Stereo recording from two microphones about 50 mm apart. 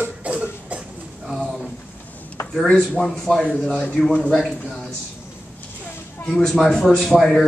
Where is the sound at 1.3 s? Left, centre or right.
Centre.